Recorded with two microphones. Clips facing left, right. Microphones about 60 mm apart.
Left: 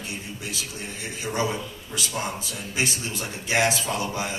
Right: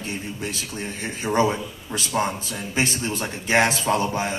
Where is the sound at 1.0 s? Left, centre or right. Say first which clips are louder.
Right 6 dB; right.